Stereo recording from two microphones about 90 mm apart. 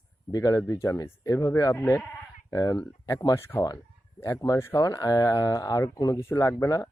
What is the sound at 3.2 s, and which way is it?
Speech, 30° left (ahead or behind).